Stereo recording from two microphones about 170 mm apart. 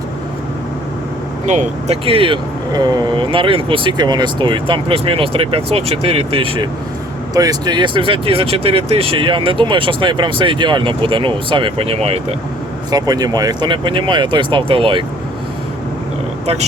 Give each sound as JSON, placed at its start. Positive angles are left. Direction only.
{"t": 1.5, "sound": "speech", "side_deg": -40}
{"t": 12.9, "sound": "speech", "side_deg": -20}